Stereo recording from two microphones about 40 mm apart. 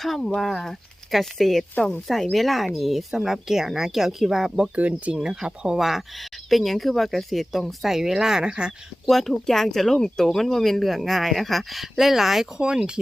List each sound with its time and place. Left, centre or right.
0.3 s speech: centre
4.7 s speech: right
5.1 s speech: centre
5.8 s speech: centre; by 8.7 s right
9.0 s speech: centre
12.5 s speech: centre